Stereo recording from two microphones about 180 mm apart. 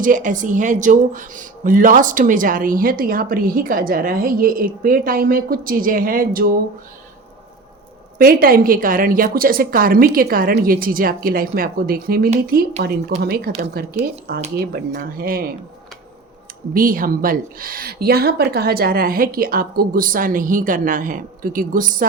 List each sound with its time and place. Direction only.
0.0 s speech: 45° right (ahead or behind)
8.2 s speech: 55° right (ahead or behind)
16.7 s speech: 50° right (ahead or behind)